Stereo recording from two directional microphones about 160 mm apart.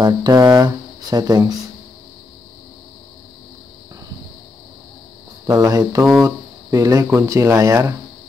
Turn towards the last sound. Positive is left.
turn(degrees=-20)  # may be behind; listen again after turning